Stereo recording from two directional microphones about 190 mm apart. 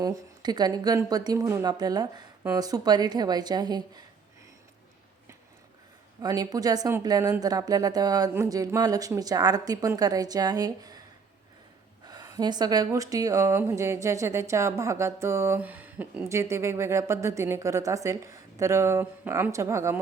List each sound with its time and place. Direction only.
0.0 s speech: 20° right (ahead or behind)
6.2 s speech: 20° right (ahead or behind)
12.0 s speech: 20° right (ahead or behind)